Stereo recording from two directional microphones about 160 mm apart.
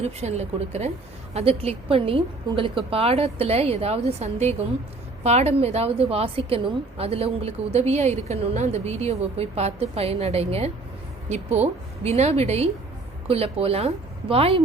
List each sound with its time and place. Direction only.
0.0 s a woman's voice: 45° right (ahead or behind)